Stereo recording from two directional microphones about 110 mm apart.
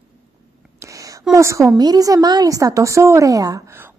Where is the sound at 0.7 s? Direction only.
30° right (ahead or behind).